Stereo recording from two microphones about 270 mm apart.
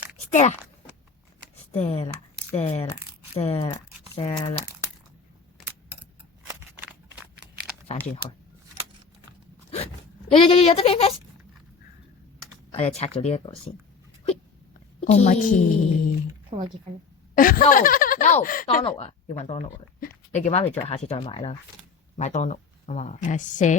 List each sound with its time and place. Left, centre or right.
0.3 s speech: left
1.7 s speech: left
7.9 s speech: left
9.7 s speech: left
12.7 s speech: left
15.0 s speech: left
16.5 s a woman's voice: right
17.3 s speech: left